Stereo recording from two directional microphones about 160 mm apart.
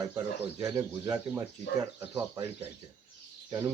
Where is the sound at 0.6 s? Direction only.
20° right (ahead or behind).